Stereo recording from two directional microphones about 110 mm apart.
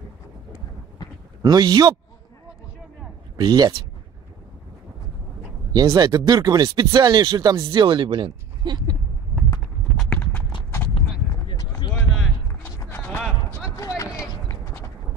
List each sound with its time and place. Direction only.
1.4 s speech: 35° right (ahead or behind)
3.3 s speech: 40° right (ahead or behind)
5.7 s speech: 35° right (ahead or behind)
9.9 s clip-clop: 10° left (ahead or behind)
12.7 s run: 20° left (ahead or behind)
13.7 s a sound: 30° left (ahead or behind)